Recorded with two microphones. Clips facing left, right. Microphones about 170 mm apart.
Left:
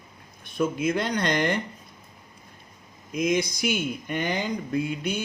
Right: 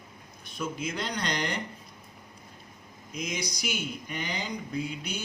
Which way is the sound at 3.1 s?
50° left (ahead or behind).